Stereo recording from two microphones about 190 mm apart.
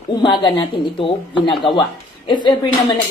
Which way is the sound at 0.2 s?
25° left (ahead or behind).